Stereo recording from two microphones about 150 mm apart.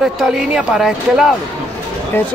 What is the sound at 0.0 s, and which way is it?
Speech, 5° right (ahead or behind).